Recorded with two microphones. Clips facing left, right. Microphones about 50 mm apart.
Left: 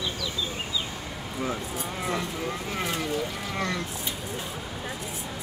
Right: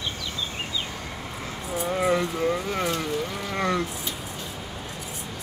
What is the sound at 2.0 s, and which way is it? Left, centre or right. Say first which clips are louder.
Speech: right 7 dB; centre.